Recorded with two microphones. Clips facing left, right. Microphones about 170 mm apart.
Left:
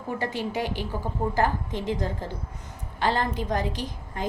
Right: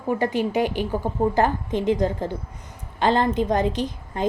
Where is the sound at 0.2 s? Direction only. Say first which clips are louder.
Right 5 dB; 15° right (ahead or behind).